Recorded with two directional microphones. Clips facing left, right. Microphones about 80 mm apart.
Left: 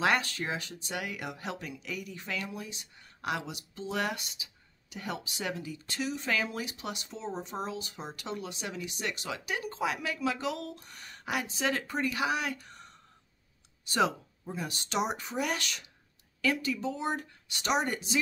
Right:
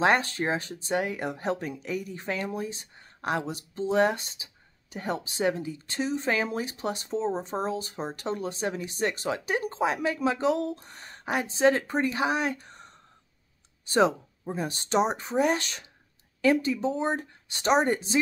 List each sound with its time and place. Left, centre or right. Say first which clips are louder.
0.0 s speech: right 5 dB; right